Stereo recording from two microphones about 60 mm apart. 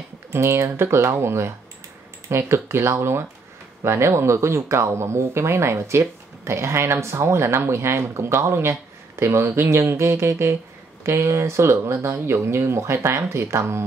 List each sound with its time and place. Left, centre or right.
0.3 s speech: right